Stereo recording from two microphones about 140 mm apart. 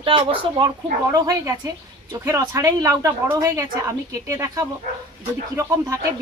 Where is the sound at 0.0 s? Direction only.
40° right (ahead or behind).